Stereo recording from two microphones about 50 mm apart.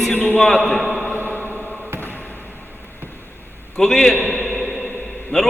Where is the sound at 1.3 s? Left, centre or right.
Left.